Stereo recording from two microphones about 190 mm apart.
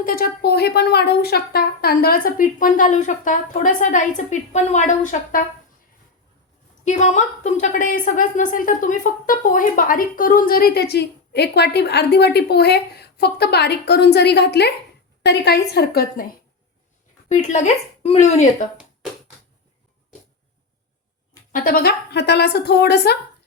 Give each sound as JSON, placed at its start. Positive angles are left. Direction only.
{"t": 0.0, "sound": "a woman's voice", "side_deg": 50}
{"t": 6.8, "sound": "a woman's voice", "side_deg": 40}
{"t": 17.2, "sound": "speech", "side_deg": 40}
{"t": 21.5, "sound": "a woman's voice", "side_deg": 50}